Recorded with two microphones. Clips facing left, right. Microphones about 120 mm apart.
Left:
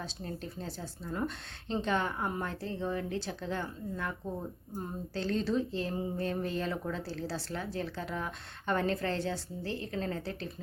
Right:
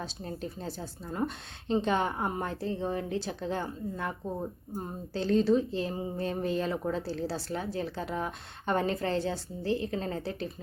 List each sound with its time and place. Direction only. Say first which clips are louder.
0.0 s a woman's voice: right 3 dB; 15° right (ahead or behind)